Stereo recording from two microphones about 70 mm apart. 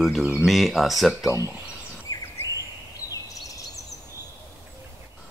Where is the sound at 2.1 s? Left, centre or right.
Left.